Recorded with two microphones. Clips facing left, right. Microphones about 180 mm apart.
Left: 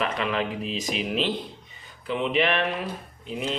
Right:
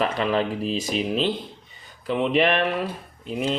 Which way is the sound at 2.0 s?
45° right (ahead or behind).